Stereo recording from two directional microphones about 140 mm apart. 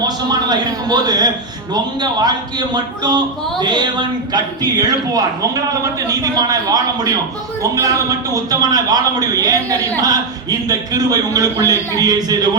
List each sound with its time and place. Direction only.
0.0 s a man's voice: 30° right (ahead or behind)